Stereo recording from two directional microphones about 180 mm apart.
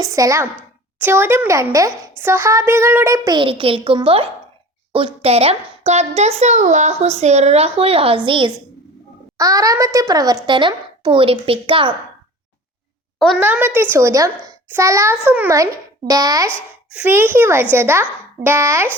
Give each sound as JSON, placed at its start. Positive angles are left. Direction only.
{"t": 0.0, "sound": "a child's voice", "side_deg": -15}
{"t": 13.1, "sound": "a woman's voice", "side_deg": 0}
{"t": 13.4, "sound": "a child's voice", "side_deg": -10}